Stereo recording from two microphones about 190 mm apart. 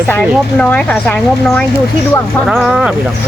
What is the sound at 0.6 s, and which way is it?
Speech, 5° left (ahead or behind).